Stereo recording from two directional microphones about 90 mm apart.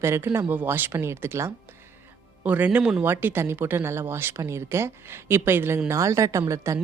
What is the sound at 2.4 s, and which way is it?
A woman's voice, 20° right (ahead or behind).